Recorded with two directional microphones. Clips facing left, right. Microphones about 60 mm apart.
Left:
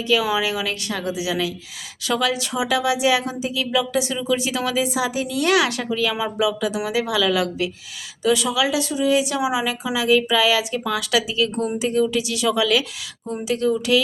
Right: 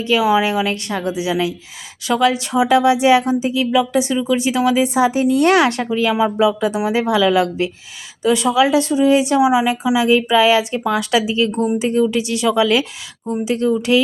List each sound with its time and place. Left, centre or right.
0.0 s a woman's voice: right